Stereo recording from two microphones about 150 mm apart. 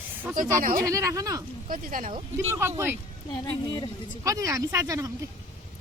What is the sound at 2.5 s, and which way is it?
Speech, 15° right (ahead or behind).